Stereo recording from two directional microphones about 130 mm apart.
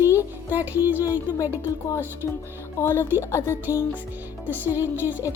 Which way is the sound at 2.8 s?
20° left (ahead or behind).